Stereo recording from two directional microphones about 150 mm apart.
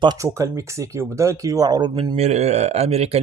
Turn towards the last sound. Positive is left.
turn(degrees=-45)  # may be behind; listen again after turning